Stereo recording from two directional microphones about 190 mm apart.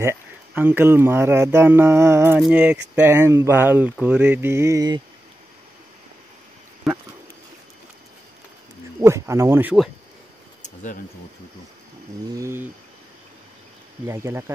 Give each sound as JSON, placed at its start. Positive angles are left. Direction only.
{"t": 0.0, "sound": "speech", "side_deg": -10}
{"t": 6.8, "sound": "a sound", "side_deg": 0}
{"t": 9.0, "sound": "speech", "side_deg": -15}
{"t": 10.6, "sound": "a sound", "side_deg": 40}
{"t": 12.4, "sound": "speech", "side_deg": -15}
{"t": 14.0, "sound": "speech", "side_deg": -15}